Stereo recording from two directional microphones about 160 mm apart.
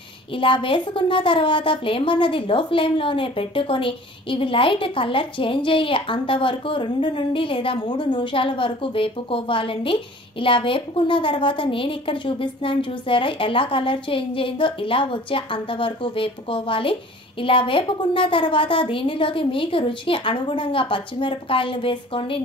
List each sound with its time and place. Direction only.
0.4 s a woman's voice: 30° left (ahead or behind)